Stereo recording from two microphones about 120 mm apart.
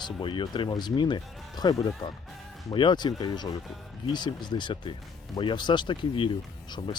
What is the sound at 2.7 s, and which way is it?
Speech, 40° left (ahead or behind).